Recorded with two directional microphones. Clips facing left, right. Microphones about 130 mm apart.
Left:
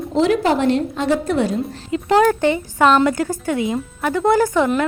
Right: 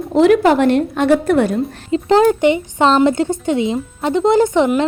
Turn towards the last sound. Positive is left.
turn(degrees=-20)  # may be behind; listen again after turning